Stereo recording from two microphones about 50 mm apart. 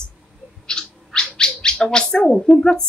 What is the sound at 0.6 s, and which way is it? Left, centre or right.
Owl, centre.